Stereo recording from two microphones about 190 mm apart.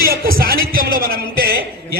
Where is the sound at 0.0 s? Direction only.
50° right (ahead or behind).